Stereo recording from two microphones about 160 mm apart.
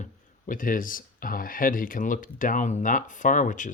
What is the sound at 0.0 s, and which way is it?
Speech, 55° left (ahead or behind).